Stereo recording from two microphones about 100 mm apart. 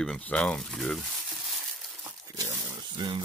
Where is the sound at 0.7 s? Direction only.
Centre (ahead or behind).